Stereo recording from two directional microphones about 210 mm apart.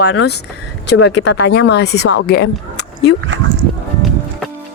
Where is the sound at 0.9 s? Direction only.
60° left (ahead or behind).